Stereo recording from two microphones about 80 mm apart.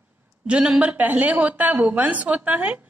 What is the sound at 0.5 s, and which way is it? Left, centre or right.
A woman's voice, centre.